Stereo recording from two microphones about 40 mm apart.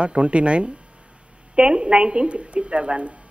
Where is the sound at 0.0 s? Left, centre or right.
Right.